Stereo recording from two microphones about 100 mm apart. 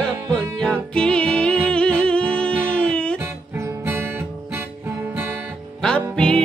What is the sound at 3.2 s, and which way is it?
Music, 25° right (ahead or behind).